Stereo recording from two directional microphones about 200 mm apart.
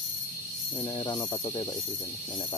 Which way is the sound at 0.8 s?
20° left (ahead or behind).